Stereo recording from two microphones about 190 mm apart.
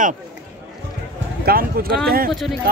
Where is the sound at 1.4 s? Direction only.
50° right (ahead or behind).